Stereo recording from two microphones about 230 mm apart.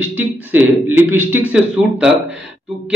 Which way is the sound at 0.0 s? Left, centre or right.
Centre.